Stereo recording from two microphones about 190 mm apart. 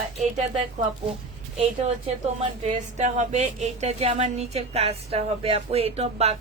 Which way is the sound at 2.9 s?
35° right (ahead or behind).